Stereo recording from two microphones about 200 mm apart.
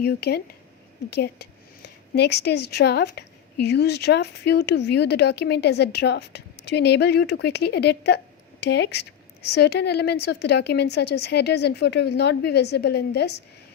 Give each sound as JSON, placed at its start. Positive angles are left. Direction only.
{"t": 0.0, "sound": "speech", "side_deg": 55}